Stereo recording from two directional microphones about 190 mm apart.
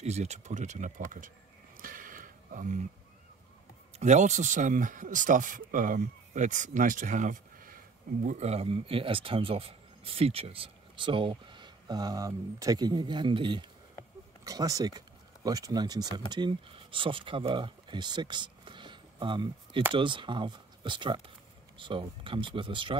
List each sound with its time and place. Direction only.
0.0 s speech: 35° right (ahead or behind)
1.8 s a sound: 45° right (ahead or behind)
4.0 s speech: 40° right (ahead or behind)